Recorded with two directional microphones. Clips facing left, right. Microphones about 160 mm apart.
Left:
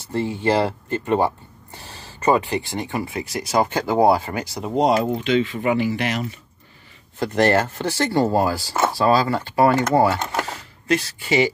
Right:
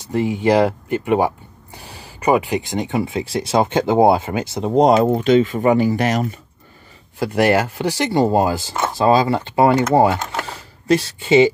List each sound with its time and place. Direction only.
0.0 s speech: 15° right (ahead or behind)
4.7 s speech: 45° right (ahead or behind)
7.2 s speech: 10° right (ahead or behind)
10.9 s speech: 30° right (ahead or behind)